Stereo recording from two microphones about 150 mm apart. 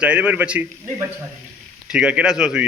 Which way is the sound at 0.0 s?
10° right (ahead or behind).